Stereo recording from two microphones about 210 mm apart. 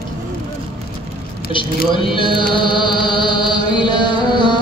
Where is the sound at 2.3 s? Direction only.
25° left (ahead or behind).